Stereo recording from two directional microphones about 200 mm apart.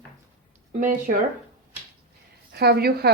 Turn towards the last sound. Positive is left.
turn(degrees=-50)  # may be behind; listen again after turning